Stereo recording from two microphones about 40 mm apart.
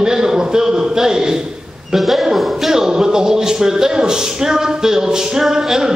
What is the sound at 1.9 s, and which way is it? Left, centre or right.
A man's voice, centre.